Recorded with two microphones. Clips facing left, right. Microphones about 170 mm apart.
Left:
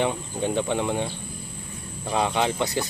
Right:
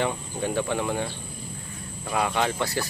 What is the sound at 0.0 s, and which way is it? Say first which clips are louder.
Speech: left 2 dB; 20° left (ahead or behind).